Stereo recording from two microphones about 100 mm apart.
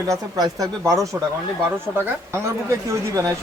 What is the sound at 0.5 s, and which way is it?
Speech, 35° right (ahead or behind).